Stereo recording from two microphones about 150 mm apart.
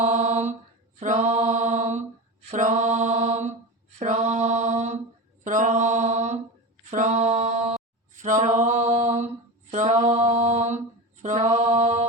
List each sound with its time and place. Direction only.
0.0 s mantra: 50° right (ahead or behind)
8.1 s a sound: 55° right (ahead or behind)
9.7 s mantra: 55° right (ahead or behind)